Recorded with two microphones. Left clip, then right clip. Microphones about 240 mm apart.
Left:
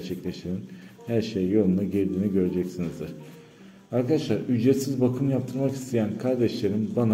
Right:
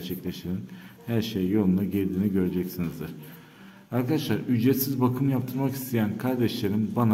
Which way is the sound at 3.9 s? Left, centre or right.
Right.